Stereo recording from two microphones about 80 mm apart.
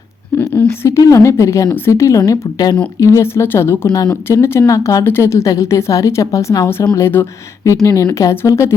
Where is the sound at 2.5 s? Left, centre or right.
Left.